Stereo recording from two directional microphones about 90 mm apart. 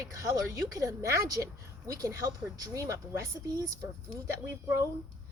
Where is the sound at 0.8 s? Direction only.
35° right (ahead or behind).